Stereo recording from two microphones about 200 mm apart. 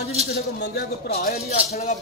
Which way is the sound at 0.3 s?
55° left (ahead or behind).